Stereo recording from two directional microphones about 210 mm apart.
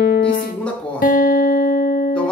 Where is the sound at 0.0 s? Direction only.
45° left (ahead or behind).